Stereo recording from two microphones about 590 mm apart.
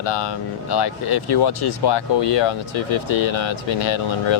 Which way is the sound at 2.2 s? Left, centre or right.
Left.